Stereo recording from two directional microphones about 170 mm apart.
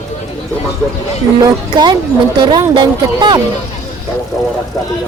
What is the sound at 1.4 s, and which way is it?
Speech, 25° right (ahead or behind).